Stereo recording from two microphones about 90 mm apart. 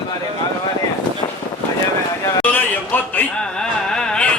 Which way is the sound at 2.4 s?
20° left (ahead or behind).